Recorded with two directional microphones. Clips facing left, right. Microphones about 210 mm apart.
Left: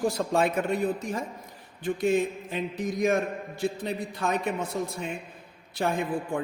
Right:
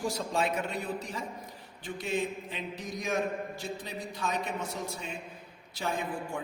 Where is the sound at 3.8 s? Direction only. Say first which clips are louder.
Left 6 dB; 55° left (ahead or behind).